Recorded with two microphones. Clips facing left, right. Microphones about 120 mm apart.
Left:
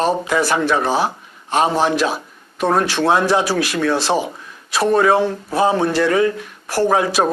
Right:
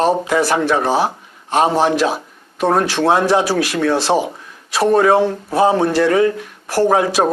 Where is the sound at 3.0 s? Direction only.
40° right (ahead or behind).